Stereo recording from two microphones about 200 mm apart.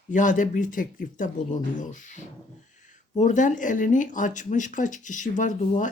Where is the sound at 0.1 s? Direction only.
40° left (ahead or behind).